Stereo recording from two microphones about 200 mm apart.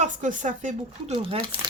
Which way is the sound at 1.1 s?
25° right (ahead or behind).